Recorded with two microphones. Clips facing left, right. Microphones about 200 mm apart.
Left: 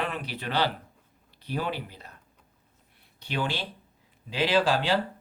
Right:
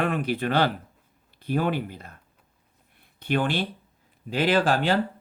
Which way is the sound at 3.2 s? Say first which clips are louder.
Right 6 dB; 50° right (ahead or behind).